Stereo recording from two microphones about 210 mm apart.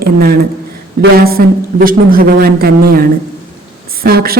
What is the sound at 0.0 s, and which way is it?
A woman's voice, 45° right (ahead or behind).